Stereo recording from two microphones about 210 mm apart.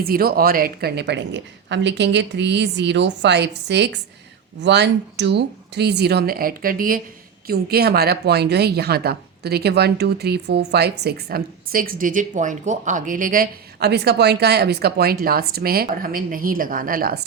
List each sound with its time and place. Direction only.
0.0 s speech: 45° right (ahead or behind)